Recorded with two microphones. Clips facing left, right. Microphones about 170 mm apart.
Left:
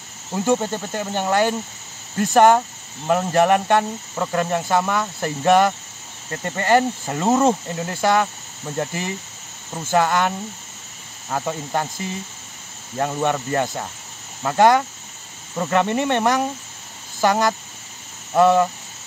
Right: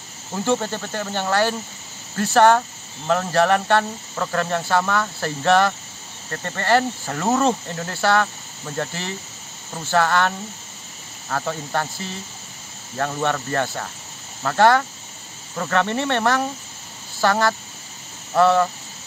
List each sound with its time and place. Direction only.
0.3 s speech: 15° left (ahead or behind)